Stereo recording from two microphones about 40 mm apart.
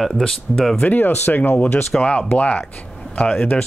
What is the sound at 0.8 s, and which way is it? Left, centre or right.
Speech, left.